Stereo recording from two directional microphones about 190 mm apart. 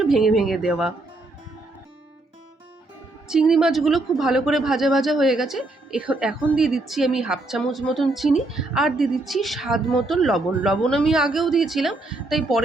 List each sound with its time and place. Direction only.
0.0 s a woman's voice: centre (ahead or behind)
3.2 s a woman's voice: centre (ahead or behind)